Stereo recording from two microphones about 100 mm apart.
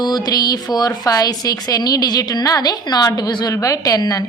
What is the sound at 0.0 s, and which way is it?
A woman's voice, 40° left (ahead or behind).